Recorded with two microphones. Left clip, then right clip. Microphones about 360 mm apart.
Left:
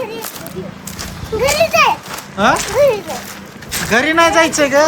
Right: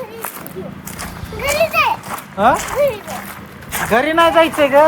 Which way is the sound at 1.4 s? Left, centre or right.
Centre.